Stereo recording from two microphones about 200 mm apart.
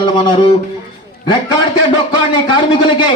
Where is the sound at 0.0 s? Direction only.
25° left (ahead or behind).